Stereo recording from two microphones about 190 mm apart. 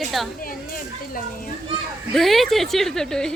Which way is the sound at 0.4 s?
50° left (ahead or behind).